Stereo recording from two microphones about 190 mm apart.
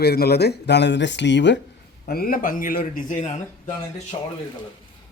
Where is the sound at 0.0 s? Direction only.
55° left (ahead or behind).